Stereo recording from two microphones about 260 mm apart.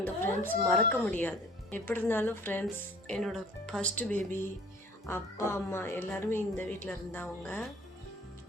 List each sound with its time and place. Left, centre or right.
0.0 s a woman's voice: centre